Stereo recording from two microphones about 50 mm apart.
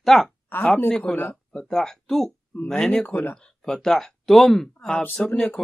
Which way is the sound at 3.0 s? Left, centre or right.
Left.